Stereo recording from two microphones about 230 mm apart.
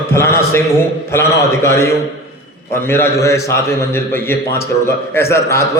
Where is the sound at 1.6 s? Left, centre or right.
Centre.